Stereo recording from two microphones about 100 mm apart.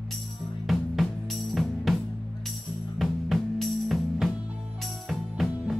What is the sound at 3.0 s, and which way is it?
Music, centre (ahead or behind).